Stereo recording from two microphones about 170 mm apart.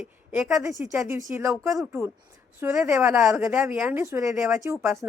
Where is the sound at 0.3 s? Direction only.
5° right (ahead or behind).